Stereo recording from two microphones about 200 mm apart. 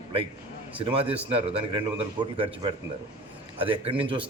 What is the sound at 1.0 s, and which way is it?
Speech, 5° right (ahead or behind).